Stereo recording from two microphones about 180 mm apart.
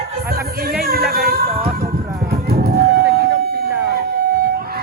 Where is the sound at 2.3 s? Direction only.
60° right (ahead or behind).